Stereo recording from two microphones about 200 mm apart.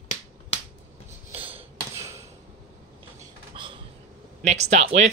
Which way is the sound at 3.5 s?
25° right (ahead or behind).